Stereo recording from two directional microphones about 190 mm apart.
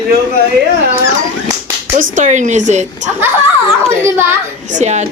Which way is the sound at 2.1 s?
40° right (ahead or behind).